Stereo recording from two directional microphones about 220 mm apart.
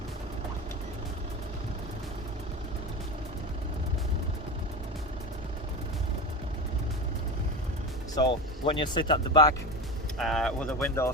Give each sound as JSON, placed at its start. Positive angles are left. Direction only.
{"t": 8.1, "sound": "speech", "side_deg": 20}
{"t": 10.2, "sound": "speech", "side_deg": 0}